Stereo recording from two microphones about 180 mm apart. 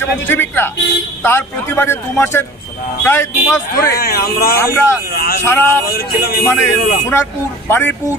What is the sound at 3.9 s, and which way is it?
Speech, 60° left (ahead or behind).